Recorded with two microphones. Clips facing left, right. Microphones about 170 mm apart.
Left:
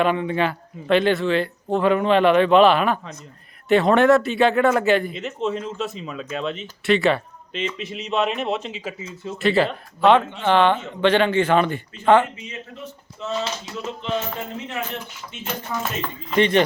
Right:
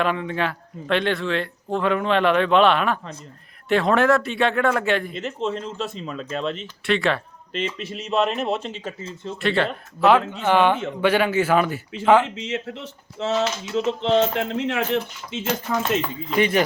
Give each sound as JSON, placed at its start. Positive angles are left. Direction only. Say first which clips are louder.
{"t": 0.0, "sound": "a man's voice", "louder": "left 3 dB", "side_deg": 0}
{"t": 12.3, "sound": "speech", "louder": "right 8 dB", "side_deg": -90}
{"t": 16.0, "sound": "a man's voice", "louder": "left 1 dB", "side_deg": -5}